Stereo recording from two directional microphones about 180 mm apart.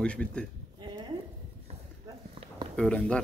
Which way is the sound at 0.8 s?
25° right (ahead or behind).